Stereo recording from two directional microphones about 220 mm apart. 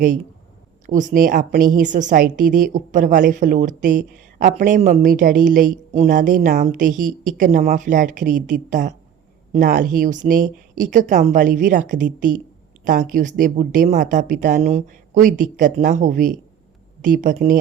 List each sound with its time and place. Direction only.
0.9 s a woman's voice: 35° right (ahead or behind)